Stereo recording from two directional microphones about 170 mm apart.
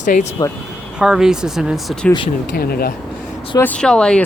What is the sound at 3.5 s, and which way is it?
Speech, 10° left (ahead or behind).